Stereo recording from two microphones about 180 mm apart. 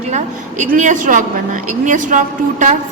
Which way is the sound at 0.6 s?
45° right (ahead or behind).